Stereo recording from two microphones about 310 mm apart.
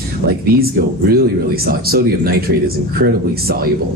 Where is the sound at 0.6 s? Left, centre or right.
Right.